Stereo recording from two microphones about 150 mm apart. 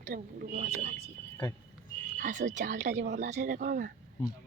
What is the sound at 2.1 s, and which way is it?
Speech, 55° right (ahead or behind).